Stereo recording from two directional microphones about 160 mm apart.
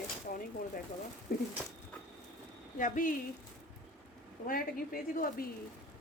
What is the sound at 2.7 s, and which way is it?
Speech, 55° left (ahead or behind).